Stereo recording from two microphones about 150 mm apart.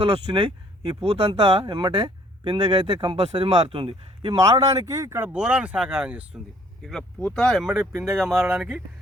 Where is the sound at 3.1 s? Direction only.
45° right (ahead or behind).